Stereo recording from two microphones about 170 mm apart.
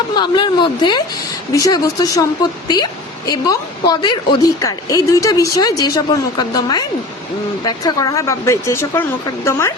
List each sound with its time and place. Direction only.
0.2 s a woman's voice: 30° left (ahead or behind)